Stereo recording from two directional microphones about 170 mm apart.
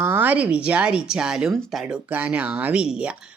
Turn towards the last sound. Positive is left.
turn(degrees=-5)  # may be behind; listen again after turning